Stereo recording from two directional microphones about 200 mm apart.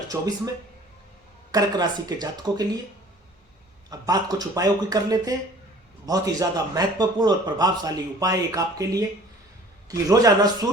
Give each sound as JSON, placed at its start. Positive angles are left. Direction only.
{"t": 0.1, "sound": "speech", "side_deg": -15}
{"t": 1.5, "sound": "speech", "side_deg": -20}
{"t": 3.8, "sound": "speech", "side_deg": -20}